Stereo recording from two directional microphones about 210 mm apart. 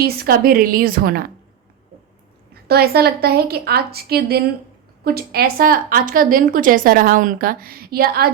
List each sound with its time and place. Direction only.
0.0 s a woman's voice: 45° right (ahead or behind)
2.6 s a woman's voice: 50° right (ahead or behind)